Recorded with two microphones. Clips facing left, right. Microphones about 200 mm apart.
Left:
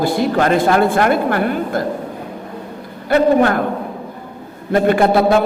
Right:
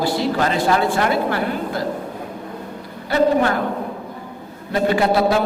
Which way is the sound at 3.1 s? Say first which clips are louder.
Left 4 dB; 55° left (ahead or behind).